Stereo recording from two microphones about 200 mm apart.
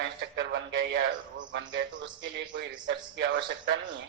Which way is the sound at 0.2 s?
60° right (ahead or behind).